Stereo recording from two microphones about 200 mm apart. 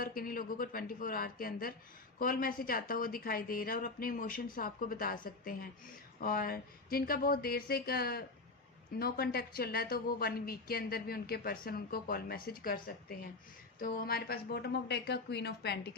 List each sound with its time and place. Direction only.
0.0 s speech: 45° left (ahead or behind)